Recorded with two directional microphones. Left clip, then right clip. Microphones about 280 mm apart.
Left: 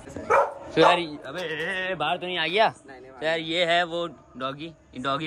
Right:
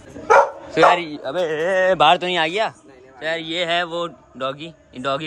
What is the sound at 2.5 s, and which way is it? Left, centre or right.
A man's voice, centre.